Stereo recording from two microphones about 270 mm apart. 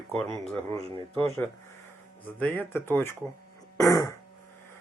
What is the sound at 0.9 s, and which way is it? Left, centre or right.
Speech, centre.